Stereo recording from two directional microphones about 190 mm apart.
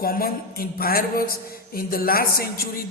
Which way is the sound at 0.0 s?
50° left (ahead or behind).